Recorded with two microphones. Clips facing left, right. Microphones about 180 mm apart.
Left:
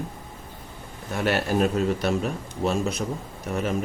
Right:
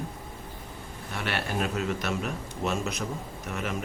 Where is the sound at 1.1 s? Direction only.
40° left (ahead or behind).